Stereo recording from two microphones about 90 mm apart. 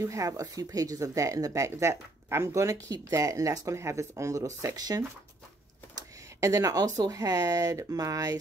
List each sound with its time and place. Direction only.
0.0 s speech: 40° right (ahead or behind)
6.4 s speech: 40° right (ahead or behind)